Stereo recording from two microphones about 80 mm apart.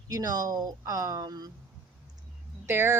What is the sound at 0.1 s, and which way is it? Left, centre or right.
Speech, right.